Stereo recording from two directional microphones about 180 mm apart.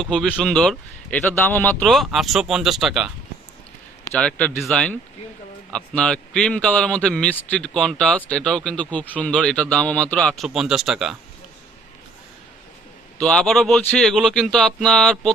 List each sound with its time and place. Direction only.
0.0 s a man's voice: centre (ahead or behind)
4.1 s a man's voice: 5° left (ahead or behind)
13.1 s a man's voice: 5° left (ahead or behind)